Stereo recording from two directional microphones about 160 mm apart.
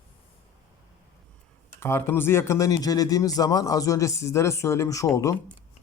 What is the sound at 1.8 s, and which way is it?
Speech, 15° left (ahead or behind).